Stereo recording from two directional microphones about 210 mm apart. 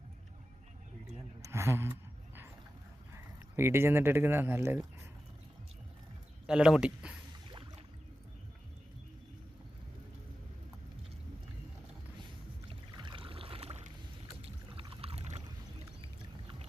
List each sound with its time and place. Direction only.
1.4 s a sound: 10° right (ahead or behind)
3.1 s speech: 10° right (ahead or behind)
6.5 s speech: 5° right (ahead or behind)
13.0 s boat: 25° right (ahead or behind)
14.4 s rowboat: 25° right (ahead or behind)